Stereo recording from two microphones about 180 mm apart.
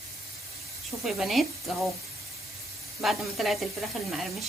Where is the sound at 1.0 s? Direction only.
Centre (ahead or behind).